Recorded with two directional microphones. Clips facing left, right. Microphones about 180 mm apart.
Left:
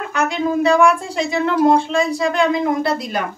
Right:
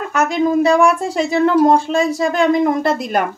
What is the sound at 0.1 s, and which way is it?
A woman's voice, 40° right (ahead or behind).